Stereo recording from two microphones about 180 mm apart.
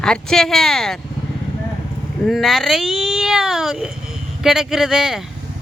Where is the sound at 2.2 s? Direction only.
Centre (ahead or behind).